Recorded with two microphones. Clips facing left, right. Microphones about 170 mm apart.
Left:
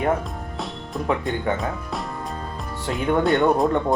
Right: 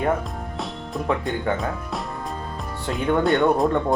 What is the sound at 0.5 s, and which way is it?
Music, centre (ahead or behind).